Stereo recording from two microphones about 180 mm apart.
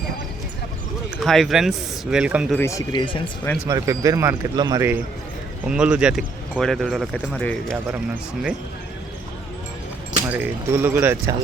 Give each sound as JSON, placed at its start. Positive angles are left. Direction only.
{"t": 1.2, "sound": "speech", "side_deg": 0}
{"t": 2.6, "sound": "speech", "side_deg": 20}
{"t": 3.7, "sound": "speech", "side_deg": -15}
{"t": 5.6, "sound": "speech", "side_deg": -5}
{"t": 10.2, "sound": "speech", "side_deg": -10}